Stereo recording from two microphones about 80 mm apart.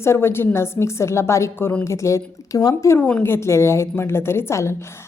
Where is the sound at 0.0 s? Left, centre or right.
Left.